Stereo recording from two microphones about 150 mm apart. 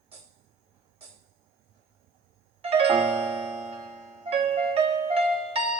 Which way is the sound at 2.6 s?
40° right (ahead or behind).